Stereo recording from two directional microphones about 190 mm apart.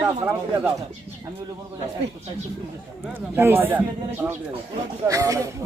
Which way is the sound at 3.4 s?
10° right (ahead or behind).